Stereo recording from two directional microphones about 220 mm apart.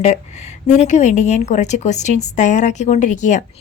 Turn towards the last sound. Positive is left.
turn(degrees=35)  # may be behind; listen again after turning